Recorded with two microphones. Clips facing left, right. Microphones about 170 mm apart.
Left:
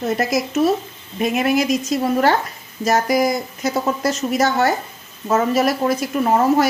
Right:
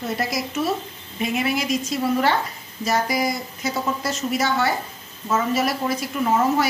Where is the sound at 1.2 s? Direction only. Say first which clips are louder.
Left 6 dB; 45° left (ahead or behind).